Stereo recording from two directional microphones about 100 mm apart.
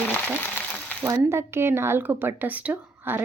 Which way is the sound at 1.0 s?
30° right (ahead or behind).